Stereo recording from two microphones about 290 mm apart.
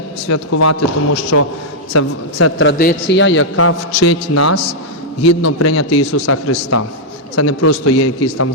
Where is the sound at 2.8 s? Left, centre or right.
Left.